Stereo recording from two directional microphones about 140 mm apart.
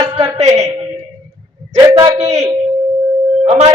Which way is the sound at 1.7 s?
20° right (ahead or behind).